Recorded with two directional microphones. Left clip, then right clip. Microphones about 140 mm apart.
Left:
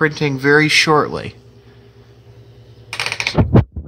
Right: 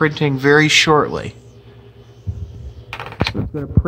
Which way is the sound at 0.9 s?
15° left (ahead or behind).